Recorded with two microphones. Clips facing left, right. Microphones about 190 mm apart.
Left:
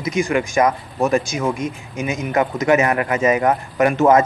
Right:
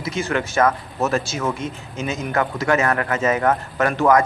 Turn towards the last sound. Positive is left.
turn(degrees=20)  # may be behind; listen again after turning